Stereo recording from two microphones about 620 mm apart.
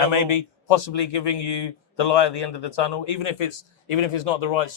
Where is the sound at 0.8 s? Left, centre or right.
Left.